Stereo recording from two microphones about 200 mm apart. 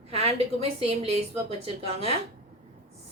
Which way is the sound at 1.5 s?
30° right (ahead or behind).